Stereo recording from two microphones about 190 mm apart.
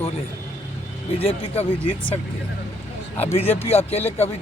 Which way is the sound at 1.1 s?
30° left (ahead or behind).